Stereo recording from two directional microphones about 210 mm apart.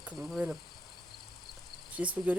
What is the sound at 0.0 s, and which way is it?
Speech, centre (ahead or behind).